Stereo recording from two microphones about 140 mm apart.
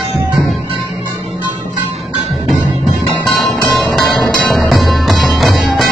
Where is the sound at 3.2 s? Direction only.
Centre (ahead or behind).